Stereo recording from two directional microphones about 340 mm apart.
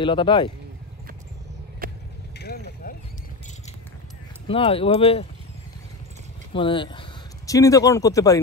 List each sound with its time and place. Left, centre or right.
0.0 s speech: centre
1.8 s vehicle: right
2.3 s mechanisms: left
4.5 s speech: centre
6.5 s speech: centre